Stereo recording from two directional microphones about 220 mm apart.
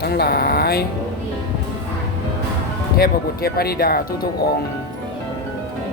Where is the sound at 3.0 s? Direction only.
45° left (ahead or behind).